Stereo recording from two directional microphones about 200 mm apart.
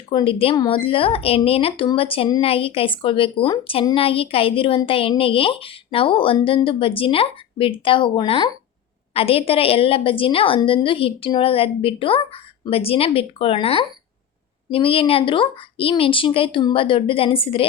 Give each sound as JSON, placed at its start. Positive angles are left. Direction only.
{"t": 0.1, "sound": "a woman's voice", "side_deg": 25}